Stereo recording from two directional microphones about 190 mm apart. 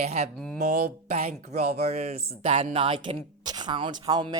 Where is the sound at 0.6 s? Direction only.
55° right (ahead or behind).